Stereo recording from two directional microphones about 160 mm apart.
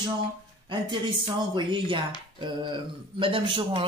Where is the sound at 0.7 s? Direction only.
30° right (ahead or behind).